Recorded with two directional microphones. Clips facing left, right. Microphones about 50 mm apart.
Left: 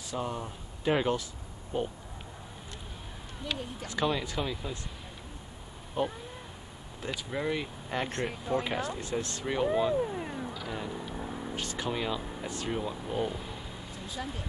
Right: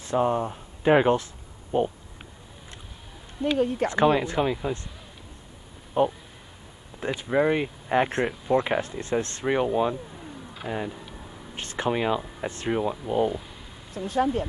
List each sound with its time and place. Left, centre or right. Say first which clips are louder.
0.1 s speech: right 11 dB; right
3.5 s speech: right 19 dB; right
3.9 s speech: right 6 dB; right
6.0 s speech: right 8 dB; right
9.0 s speech: right 7 dB; right
9.9 s a sound: left 8 dB; left
10.5 s vehicle: right 6 dB; right
10.9 s vehicle: left 1 dB; centre
11.1 s vehicle: left 5 dB; centre
11.5 s speech: right 8 dB; right
12.9 s speech: right 8 dB; centre
13.3 s speech: right 5 dB; centre
13.9 s speech: right 15 dB; right